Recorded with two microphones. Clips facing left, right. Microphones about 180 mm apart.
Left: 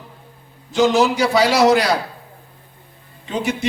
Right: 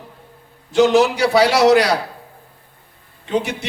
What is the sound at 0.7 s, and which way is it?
Speech, 60° right (ahead or behind).